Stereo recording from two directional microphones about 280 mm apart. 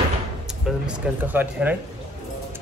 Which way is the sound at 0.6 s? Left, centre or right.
Centre.